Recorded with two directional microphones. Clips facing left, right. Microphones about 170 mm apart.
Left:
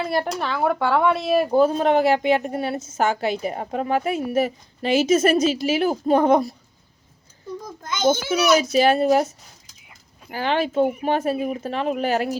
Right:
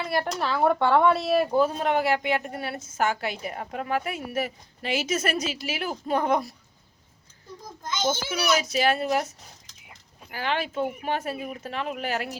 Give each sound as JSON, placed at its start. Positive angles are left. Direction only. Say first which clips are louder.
{"t": 0.0, "sound": "speech", "louder": "left 4 dB", "side_deg": 30}
{"t": 0.3, "sound": "speech", "louder": "left 1 dB", "side_deg": 0}
{"t": 1.5, "sound": "a woman's voice", "louder": "left 6 dB", "side_deg": 30}
{"t": 8.6, "sound": "a woman's voice", "louder": "left 7 dB", "side_deg": 30}
{"t": 10.3, "sound": "speech", "louder": "left 7 dB", "side_deg": 30}